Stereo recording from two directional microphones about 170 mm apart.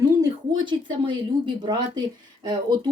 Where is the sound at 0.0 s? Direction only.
25° right (ahead or behind).